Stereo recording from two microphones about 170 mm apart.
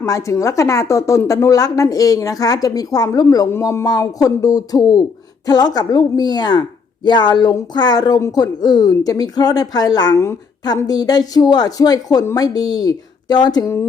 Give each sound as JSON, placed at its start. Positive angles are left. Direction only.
{"t": 0.0, "sound": "a woman's voice", "side_deg": 20}